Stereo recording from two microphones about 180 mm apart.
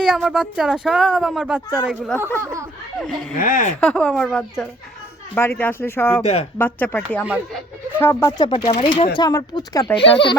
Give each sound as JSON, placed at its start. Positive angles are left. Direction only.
{"t": 0.0, "sound": "speech", "side_deg": -5}
{"t": 3.3, "sound": "speech", "side_deg": 50}
{"t": 3.8, "sound": "speech", "side_deg": 5}
{"t": 6.2, "sound": "speech", "side_deg": 35}
{"t": 6.6, "sound": "speech", "side_deg": 10}
{"t": 8.4, "sound": "speech", "side_deg": 35}